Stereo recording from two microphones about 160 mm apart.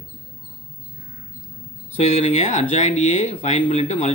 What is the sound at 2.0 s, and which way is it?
Speech, 45° left (ahead or behind).